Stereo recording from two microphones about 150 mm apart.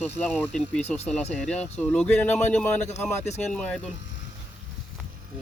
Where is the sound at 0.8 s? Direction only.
45° left (ahead or behind).